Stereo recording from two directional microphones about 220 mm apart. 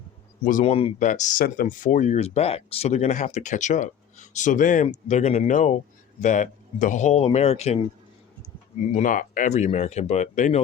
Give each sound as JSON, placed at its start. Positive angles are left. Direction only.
{"t": 0.4, "sound": "speech", "side_deg": 30}
{"t": 8.8, "sound": "speech", "side_deg": 35}